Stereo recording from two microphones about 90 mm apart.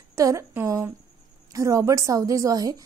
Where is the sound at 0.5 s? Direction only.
30° right (ahead or behind).